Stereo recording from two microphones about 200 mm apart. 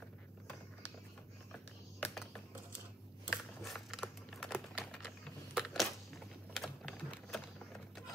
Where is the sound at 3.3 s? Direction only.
Centre (ahead or behind).